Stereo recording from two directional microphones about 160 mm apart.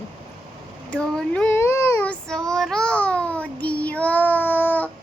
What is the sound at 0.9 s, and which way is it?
Child singing, 5° left (ahead or behind).